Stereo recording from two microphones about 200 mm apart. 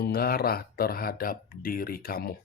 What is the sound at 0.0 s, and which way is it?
Speech, 50° left (ahead or behind).